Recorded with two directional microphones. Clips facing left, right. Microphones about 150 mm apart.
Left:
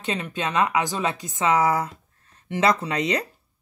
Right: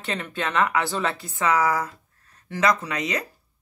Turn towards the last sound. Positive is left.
turn(degrees=30)  # may be behind; listen again after turning